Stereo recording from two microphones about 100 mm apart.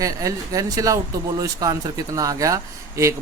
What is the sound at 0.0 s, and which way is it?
Speech, 35° right (ahead or behind).